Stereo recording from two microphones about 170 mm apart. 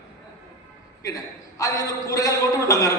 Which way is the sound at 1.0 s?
20° left (ahead or behind).